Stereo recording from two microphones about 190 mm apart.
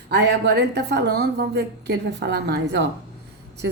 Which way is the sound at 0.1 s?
65° right (ahead or behind).